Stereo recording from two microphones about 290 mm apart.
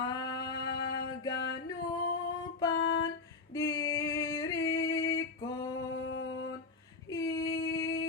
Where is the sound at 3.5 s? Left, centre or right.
Centre.